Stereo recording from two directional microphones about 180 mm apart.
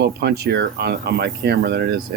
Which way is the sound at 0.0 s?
65° right (ahead or behind).